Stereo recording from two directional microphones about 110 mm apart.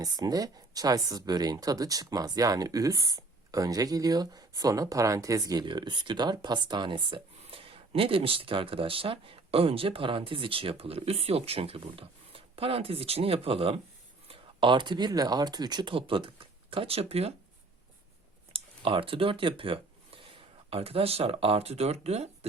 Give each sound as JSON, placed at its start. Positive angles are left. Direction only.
{"t": 0.0, "sound": "speech", "side_deg": -35}
{"t": 14.3, "sound": "speech", "side_deg": -50}
{"t": 18.5, "sound": "a sound", "side_deg": -55}
{"t": 20.7, "sound": "speech", "side_deg": -60}